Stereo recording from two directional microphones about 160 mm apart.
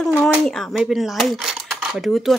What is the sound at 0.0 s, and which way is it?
Speech, centre (ahead or behind).